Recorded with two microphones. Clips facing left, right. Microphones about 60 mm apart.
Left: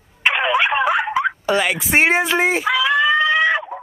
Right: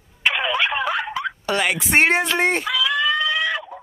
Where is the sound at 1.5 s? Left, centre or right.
Centre.